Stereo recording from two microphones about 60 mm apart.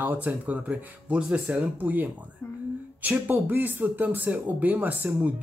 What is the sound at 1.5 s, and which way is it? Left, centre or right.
Speech, right.